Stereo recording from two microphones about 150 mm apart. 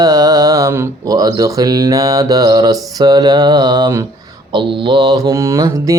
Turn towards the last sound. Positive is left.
turn(degrees=-20)  # may be behind; listen again after turning